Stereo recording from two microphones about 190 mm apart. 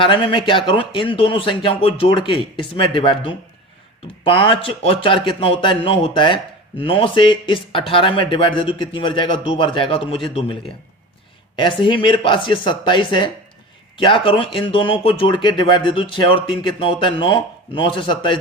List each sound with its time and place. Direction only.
0.0 s speech: 25° left (ahead or behind)